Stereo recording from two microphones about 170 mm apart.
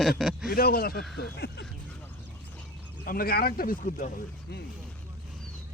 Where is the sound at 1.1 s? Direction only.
80° left.